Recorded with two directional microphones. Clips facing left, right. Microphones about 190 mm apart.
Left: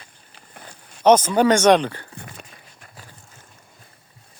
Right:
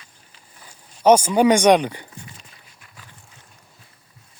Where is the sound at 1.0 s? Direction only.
10° right (ahead or behind).